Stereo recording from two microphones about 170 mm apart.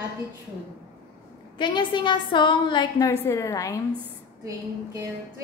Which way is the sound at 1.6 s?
30° left (ahead or behind).